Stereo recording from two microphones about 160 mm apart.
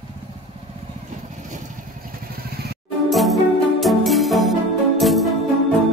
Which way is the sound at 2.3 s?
75° right (ahead or behind).